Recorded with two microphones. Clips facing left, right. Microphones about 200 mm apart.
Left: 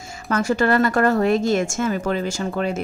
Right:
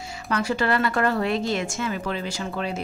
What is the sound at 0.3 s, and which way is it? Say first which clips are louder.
A woman's voice: left 5 dB; 45° left (ahead or behind).